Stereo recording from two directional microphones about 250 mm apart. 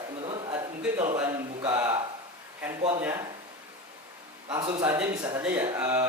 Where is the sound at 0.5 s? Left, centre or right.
Centre.